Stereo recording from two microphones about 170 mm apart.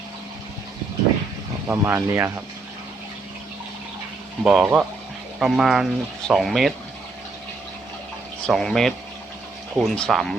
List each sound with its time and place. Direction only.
1.6 s speech: 15° right (ahead or behind)
4.4 s speech: 5° right (ahead or behind)
8.4 s speech: centre (ahead or behind)